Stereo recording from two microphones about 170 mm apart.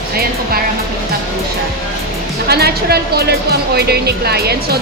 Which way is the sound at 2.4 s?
70° right (ahead or behind).